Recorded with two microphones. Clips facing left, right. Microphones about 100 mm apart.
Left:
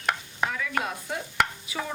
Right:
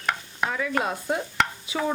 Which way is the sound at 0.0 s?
Centre (ahead or behind).